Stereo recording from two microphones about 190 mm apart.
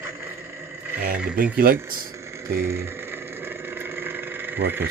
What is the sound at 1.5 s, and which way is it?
Speech, 50° right (ahead or behind).